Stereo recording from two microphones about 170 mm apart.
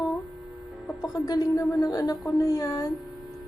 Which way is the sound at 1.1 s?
20° left (ahead or behind).